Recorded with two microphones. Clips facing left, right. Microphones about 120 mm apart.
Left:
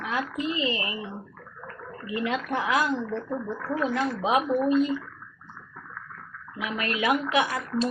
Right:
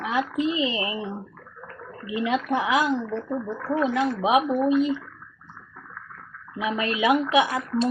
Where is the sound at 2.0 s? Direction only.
20° right (ahead or behind).